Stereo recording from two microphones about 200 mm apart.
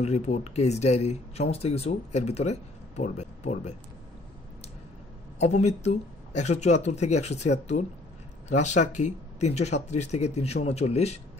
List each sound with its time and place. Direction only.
0.0 s speech: 35° left (ahead or behind)
5.4 s speech: 35° left (ahead or behind)